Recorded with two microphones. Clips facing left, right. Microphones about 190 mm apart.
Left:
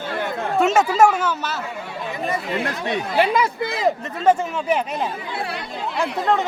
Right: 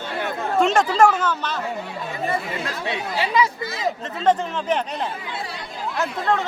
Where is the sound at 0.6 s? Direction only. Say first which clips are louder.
Left 1 dB; 5° left (ahead or behind).